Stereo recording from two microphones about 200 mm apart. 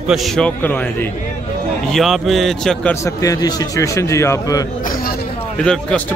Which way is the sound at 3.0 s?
15° left (ahead or behind).